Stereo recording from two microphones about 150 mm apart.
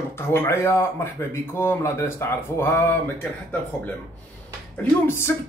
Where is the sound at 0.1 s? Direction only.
15° left (ahead or behind).